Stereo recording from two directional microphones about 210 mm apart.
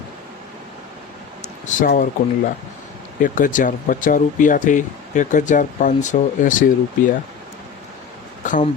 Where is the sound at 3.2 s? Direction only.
40° left (ahead or behind).